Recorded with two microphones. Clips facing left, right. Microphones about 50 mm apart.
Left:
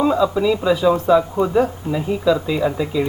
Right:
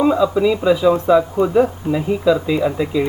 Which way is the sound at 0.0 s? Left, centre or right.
Centre.